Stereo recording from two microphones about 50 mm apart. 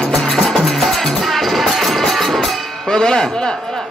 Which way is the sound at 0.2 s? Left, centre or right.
Centre.